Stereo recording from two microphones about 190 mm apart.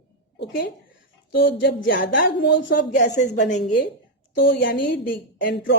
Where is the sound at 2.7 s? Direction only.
40° left (ahead or behind).